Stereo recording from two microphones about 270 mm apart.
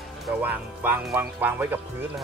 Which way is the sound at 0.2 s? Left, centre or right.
Centre.